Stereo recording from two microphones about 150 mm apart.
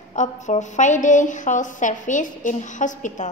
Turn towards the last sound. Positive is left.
turn(degrees=55)  # may be behind; listen again after turning